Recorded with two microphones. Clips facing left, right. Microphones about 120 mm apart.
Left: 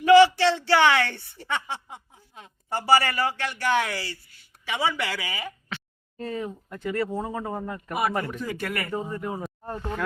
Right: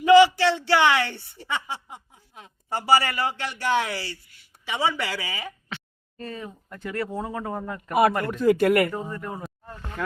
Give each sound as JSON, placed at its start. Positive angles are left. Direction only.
{"t": 0.0, "sound": "speech", "side_deg": -15}
{"t": 6.1, "sound": "speech", "side_deg": 20}
{"t": 6.8, "sound": "speech", "side_deg": 0}
{"t": 8.2, "sound": "speech", "side_deg": -85}
{"t": 8.6, "sound": "speech", "side_deg": -60}
{"t": 9.1, "sound": "speech", "side_deg": 10}